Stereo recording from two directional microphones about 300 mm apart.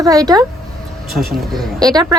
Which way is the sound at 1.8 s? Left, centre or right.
Centre.